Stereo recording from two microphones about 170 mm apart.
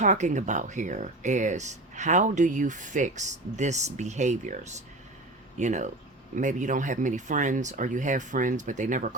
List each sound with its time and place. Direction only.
0.0 s speech: 45° right (ahead or behind)